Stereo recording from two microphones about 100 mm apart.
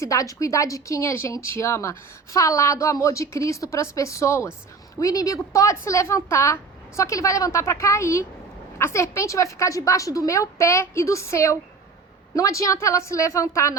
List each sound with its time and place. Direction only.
0.0 s speech: 35° left (ahead or behind)